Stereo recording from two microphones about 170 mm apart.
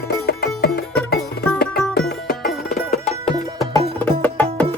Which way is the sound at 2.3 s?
55° left (ahead or behind).